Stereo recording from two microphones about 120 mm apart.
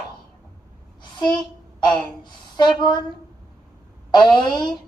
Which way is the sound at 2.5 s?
40° left (ahead or behind).